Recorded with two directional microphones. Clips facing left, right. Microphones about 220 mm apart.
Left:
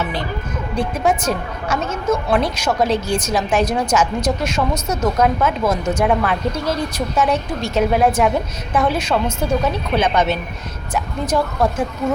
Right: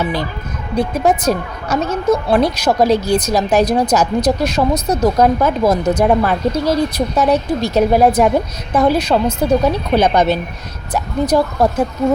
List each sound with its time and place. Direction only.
0.0 s speech: 40° right (ahead or behind)